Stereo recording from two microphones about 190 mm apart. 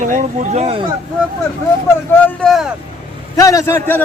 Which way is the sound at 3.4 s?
15° left (ahead or behind).